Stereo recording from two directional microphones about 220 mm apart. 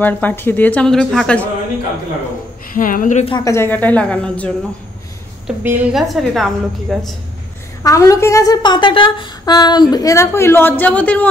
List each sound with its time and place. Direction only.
0.0 s a woman's voice: 10° left (ahead or behind)
2.7 s speech: 40° left (ahead or behind)
3.3 s a woman's voice: 15° left (ahead or behind)
5.6 s a woman's voice: 5° right (ahead or behind)
7.8 s a woman's voice: 15° left (ahead or behind)